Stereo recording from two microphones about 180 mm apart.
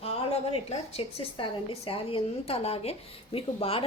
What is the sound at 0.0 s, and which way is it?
A woman's voice, 35° left (ahead or behind).